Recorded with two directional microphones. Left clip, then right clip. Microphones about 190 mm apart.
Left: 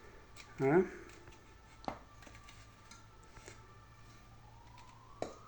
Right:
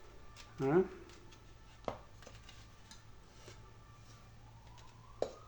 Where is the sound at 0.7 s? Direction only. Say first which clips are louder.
Left 1 dB; centre (ahead or behind).